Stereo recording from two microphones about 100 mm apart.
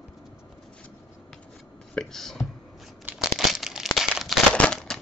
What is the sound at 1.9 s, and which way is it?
Speech, 5° left (ahead or behind).